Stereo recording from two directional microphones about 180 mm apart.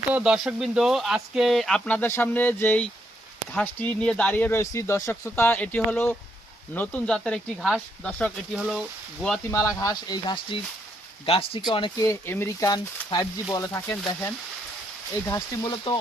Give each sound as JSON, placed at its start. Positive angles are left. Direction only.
{"t": 0.1, "sound": "speech", "side_deg": -5}
{"t": 9.5, "sound": "speech", "side_deg": 15}
{"t": 12.0, "sound": "speech", "side_deg": 15}